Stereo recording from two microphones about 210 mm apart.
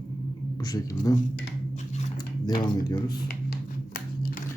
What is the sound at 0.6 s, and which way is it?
Speech, 20° left (ahead or behind).